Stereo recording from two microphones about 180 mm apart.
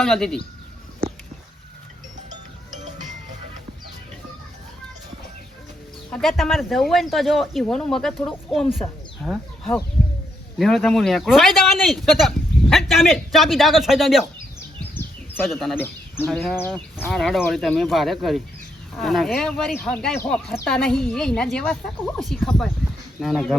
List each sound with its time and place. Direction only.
0.0 s speech: centre (ahead or behind)
6.1 s speech: 5° left (ahead or behind)
14.9 s bird: 10° left (ahead or behind)
15.4 s speech: centre (ahead or behind)